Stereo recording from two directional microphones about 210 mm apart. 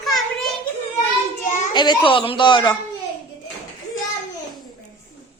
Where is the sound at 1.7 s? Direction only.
20° left (ahead or behind).